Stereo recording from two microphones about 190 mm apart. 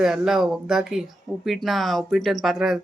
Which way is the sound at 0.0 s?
5° right (ahead or behind).